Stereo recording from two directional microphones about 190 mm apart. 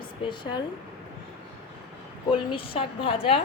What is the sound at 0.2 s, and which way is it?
Speech, 25° left (ahead or behind).